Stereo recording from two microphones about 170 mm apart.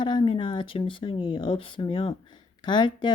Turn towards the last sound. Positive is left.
turn(degrees=25)  # may be behind; listen again after turning